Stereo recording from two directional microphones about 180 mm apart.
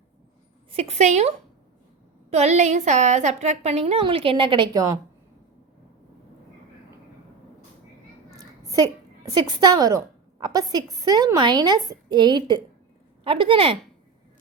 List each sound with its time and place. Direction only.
0.7 s a woman's voice: 35° right (ahead or behind)
2.3 s a woman's voice: 40° right (ahead or behind); by 4.9 s 20° right (ahead or behind)
8.4 s a sound: 20° right (ahead or behind)
10.4 s a woman's voice: 20° right (ahead or behind)